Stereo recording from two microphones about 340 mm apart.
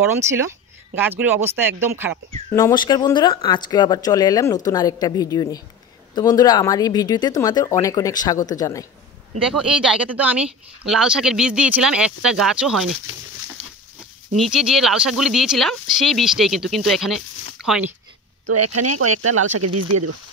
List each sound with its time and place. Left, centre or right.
0.1 s speech: centre
2.5 s speech: centre
9.4 s speech: centre
14.3 s speech: centre
18.5 s speech: right